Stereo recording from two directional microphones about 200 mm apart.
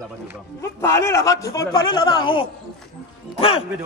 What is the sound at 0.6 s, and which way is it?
A man's voice, 15° left (ahead or behind).